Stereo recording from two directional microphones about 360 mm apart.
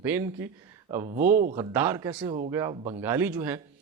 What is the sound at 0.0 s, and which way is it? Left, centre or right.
Speech, centre.